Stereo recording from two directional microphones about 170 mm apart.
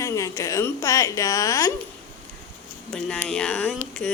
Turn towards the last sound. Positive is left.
turn(degrees=5)  # may be behind; listen again after turning